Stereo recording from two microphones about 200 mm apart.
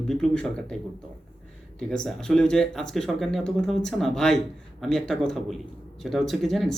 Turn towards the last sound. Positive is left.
turn(degrees=0)  # may be behind; listen again after turning